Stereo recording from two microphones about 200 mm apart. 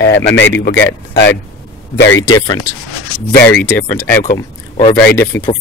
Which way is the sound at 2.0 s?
75° left (ahead or behind).